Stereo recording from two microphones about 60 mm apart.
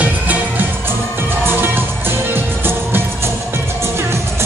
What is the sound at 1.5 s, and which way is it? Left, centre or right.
Music, right.